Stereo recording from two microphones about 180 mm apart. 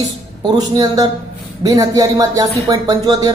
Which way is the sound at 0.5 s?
20° right (ahead or behind).